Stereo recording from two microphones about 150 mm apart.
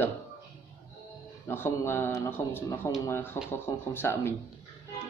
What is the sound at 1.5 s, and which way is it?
Speech, 15° left (ahead or behind).